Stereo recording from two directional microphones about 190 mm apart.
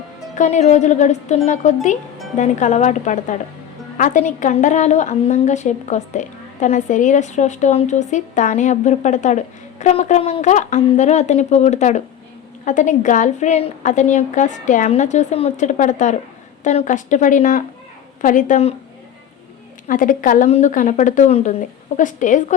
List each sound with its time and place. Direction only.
0.3 s a woman's voice: 40° left (ahead or behind)
19.9 s a woman's voice: 45° left (ahead or behind)